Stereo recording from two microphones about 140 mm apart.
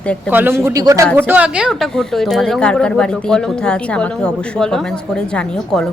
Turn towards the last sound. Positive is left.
turn(degrees=5)  # may be behind; listen again after turning